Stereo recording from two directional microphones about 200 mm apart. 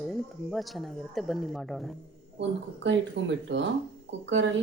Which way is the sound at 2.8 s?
65° right (ahead or behind).